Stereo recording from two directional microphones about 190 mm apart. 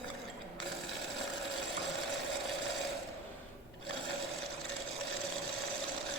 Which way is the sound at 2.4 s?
Centre (ahead or behind).